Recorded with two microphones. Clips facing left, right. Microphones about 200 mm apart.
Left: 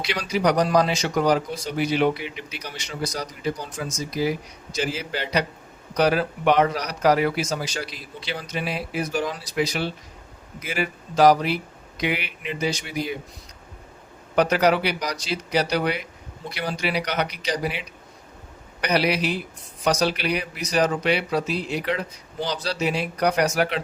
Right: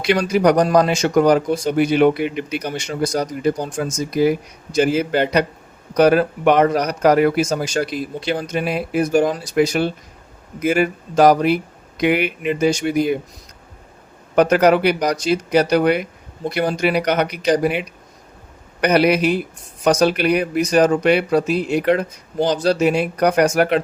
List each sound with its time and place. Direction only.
0.0 s a man's voice: 50° right (ahead or behind)
14.5 s a man's voice: 50° right (ahead or behind)